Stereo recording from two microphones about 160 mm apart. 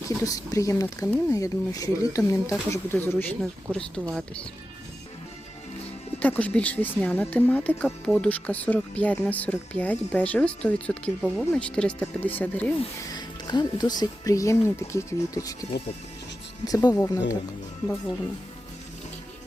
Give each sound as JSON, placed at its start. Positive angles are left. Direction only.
{"t": 0.2, "sound": "speech", "side_deg": 20}
{"t": 6.1, "sound": "speech", "side_deg": 10}
{"t": 12.8, "sound": "speech", "side_deg": 30}
{"t": 16.6, "sound": "speech", "side_deg": 20}